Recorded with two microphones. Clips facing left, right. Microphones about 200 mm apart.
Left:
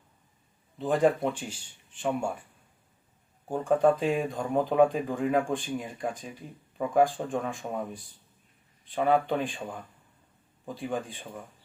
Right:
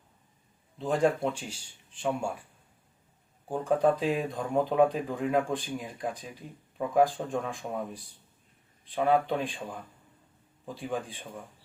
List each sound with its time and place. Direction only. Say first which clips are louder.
0.8 s speech: left 2 dB; centre (ahead or behind)
3.5 s speech: left 2 dB; centre (ahead or behind)